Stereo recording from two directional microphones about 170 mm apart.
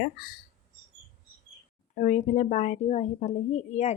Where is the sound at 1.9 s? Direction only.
45° left (ahead or behind).